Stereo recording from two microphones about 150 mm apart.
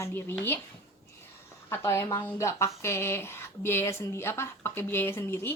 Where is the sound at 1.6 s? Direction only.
20° left (ahead or behind).